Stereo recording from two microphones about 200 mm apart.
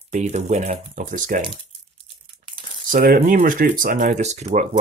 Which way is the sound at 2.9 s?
45° right (ahead or behind).